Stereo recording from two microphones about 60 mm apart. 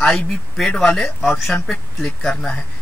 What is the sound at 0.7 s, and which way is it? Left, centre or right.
Speech, centre.